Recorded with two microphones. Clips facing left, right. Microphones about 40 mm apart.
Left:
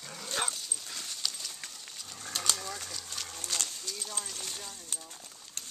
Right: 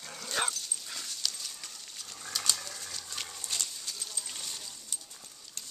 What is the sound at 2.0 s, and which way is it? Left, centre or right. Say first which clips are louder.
Livestock: even; centre.